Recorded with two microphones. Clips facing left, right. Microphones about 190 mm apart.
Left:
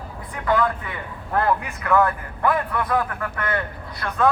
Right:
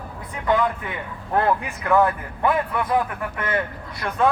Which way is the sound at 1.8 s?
20° right (ahead or behind).